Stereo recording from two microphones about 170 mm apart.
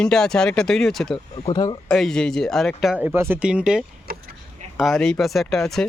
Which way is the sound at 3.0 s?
10° right (ahead or behind).